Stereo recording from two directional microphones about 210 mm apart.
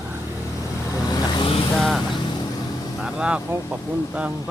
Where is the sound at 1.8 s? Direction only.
Centre (ahead or behind).